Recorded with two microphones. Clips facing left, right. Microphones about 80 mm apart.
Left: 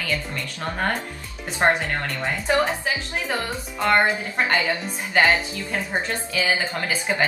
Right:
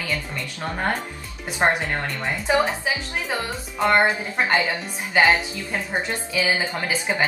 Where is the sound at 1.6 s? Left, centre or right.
Centre.